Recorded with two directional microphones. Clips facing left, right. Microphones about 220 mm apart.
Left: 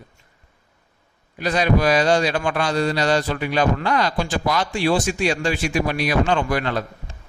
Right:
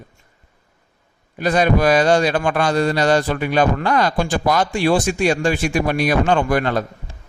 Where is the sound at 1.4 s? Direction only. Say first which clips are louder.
Right 3 dB; 50° right (ahead or behind).